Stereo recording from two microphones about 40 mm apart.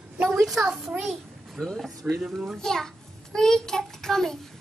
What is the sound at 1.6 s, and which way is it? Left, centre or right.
Speech, centre.